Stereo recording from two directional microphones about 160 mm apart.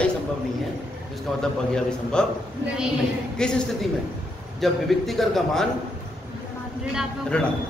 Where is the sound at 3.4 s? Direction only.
5° left (ahead or behind).